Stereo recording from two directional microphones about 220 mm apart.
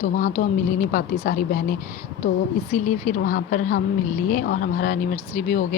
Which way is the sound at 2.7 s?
35° left (ahead or behind).